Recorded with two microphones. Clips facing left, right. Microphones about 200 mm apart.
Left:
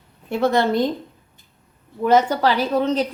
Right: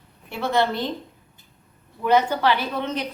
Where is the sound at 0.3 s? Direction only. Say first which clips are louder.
Left 4 dB; 45° left (ahead or behind).